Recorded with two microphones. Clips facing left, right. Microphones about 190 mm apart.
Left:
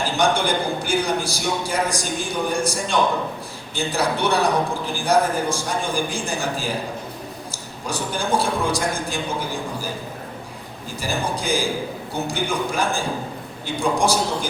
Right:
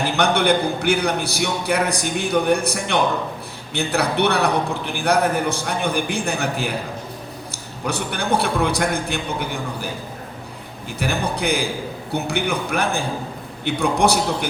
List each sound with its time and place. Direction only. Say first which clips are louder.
0.0 s a man's voice: right 2 dB; 65° right (ahead or behind)
11.0 s a man's voice: right 3 dB; 65° right (ahead or behind)